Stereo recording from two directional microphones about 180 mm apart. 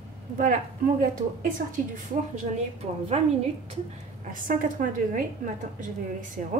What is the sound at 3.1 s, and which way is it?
Speech, 35° right (ahead or behind).